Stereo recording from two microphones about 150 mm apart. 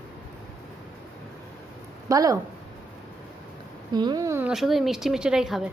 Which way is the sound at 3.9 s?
25° right (ahead or behind).